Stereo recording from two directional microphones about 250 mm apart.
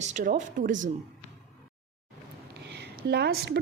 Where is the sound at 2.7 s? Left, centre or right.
Right.